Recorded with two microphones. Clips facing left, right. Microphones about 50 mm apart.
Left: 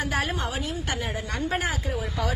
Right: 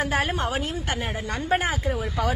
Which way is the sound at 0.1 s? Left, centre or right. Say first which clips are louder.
Right 3 dB; right.